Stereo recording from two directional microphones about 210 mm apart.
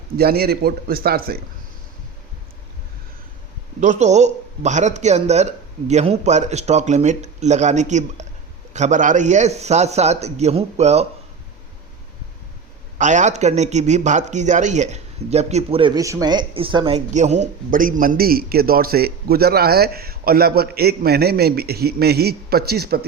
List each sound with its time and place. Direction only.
0.2 s a man's voice: 45° right (ahead or behind)
3.8 s speech: 35° right (ahead or behind)
13.0 s a man's voice: 35° right (ahead or behind)